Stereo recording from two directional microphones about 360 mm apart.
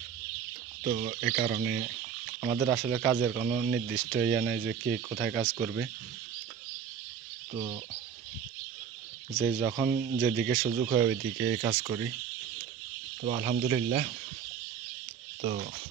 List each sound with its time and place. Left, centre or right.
1.0 s speech: right
2.4 s speech: centre
7.5 s speech: centre
9.4 s speech: centre
11.3 s speech: right
11.7 s speech: centre
13.2 s speech: centre
15.4 s speech: right